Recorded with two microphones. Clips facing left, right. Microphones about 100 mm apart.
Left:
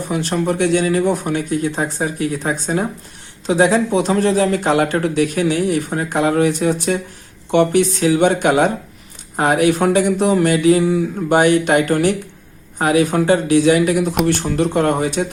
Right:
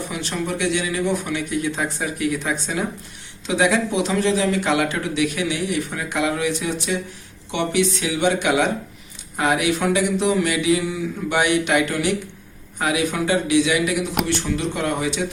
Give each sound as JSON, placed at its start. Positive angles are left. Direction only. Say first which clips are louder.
{"t": 0.1, "sound": "speech", "louder": "left 10 dB", "side_deg": 45}